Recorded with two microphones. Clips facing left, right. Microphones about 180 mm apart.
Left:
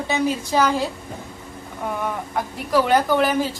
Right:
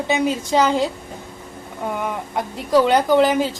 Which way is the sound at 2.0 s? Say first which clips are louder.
Right 1 dB; 20° right (ahead or behind).